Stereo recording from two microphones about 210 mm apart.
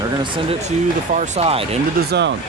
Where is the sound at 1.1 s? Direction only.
30° right (ahead or behind).